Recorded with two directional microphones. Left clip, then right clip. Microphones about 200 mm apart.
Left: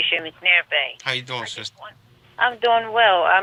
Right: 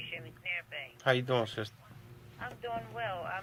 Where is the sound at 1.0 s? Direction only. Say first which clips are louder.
Left 4 dB; 10° left (ahead or behind).